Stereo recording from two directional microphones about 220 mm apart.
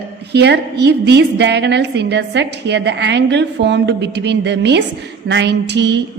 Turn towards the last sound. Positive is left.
turn(degrees=-50)  # may be behind; listen again after turning